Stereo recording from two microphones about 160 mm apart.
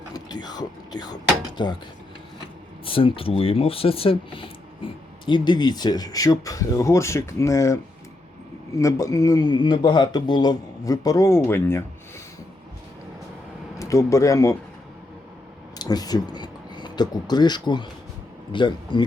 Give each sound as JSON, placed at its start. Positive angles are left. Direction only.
{"t": 0.1, "sound": "speech", "side_deg": 25}
{"t": 2.8, "sound": "speech", "side_deg": 35}
{"t": 13.7, "sound": "speech", "side_deg": 20}
{"t": 15.8, "sound": "speech", "side_deg": 25}